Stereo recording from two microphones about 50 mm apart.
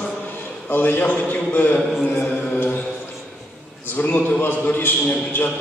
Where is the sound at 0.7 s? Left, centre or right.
Left.